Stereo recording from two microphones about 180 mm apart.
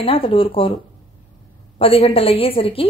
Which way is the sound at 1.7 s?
30° left (ahead or behind).